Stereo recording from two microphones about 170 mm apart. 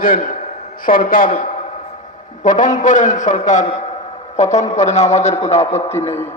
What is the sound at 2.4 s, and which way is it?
A man's voice, 50° left (ahead or behind).